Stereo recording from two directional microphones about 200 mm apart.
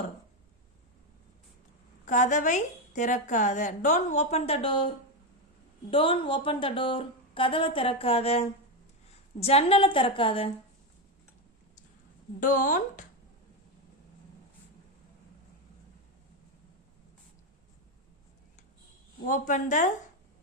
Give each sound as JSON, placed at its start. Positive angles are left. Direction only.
{"t": 2.0, "sound": "a woman's voice", "side_deg": 40}
{"t": 5.9, "sound": "a woman's voice", "side_deg": 25}
{"t": 12.4, "sound": "a woman's voice", "side_deg": 40}
{"t": 19.2, "sound": "a woman's voice", "side_deg": 40}